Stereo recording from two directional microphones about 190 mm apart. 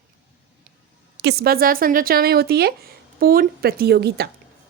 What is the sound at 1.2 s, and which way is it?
A woman's voice, 55° right (ahead or behind).